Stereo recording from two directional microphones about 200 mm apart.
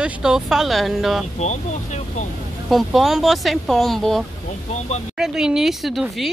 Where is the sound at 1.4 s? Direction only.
35° left (ahead or behind).